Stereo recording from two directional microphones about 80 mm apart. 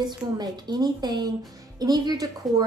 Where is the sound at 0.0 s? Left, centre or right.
Right.